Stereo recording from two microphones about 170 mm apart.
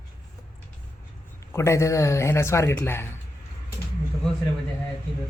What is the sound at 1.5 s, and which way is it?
Speech, 15° left (ahead or behind).